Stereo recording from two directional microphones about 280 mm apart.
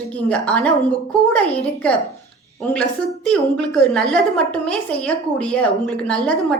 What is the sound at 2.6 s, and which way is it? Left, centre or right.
A woman's voice, centre.